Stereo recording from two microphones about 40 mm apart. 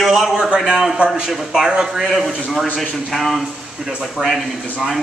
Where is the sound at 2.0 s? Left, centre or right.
Centre.